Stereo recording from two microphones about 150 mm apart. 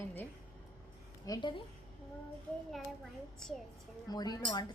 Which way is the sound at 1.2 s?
25° left (ahead or behind).